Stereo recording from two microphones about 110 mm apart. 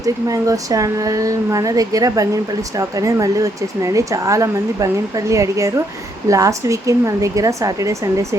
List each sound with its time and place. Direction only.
0.0 s speech: 30° right (ahead or behind)